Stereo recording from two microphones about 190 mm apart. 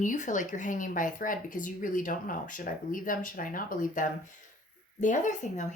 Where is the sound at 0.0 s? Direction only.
40° left (ahead or behind).